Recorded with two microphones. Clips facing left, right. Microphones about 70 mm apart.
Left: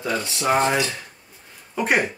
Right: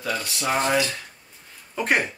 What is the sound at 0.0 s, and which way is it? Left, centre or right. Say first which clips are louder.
Speech: left 3 dB; left.